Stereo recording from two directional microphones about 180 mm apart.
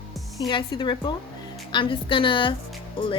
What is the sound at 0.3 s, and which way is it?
A woman's voice, 20° left (ahead or behind).